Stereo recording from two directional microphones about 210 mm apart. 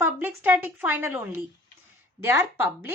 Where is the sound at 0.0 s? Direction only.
10° right (ahead or behind).